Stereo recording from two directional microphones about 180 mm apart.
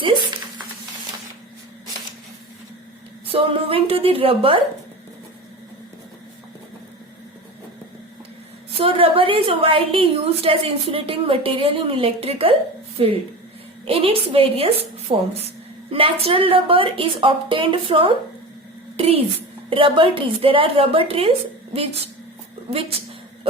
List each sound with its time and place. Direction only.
3.3 s a woman's voice: 30° right (ahead or behind)
8.8 s a woman's voice: 30° right (ahead or behind)